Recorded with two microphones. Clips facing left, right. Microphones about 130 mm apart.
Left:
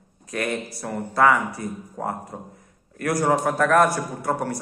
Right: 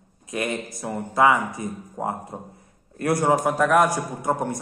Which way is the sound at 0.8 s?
15° right (ahead or behind).